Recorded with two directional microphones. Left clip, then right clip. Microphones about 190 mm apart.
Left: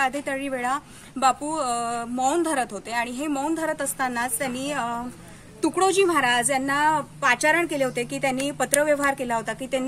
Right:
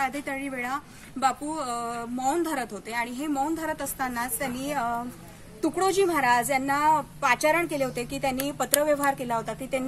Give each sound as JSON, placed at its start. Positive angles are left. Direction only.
{"t": 0.0, "sound": "a woman's voice", "side_deg": 40}